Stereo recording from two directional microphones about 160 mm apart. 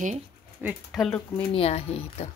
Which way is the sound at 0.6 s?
10° right (ahead or behind).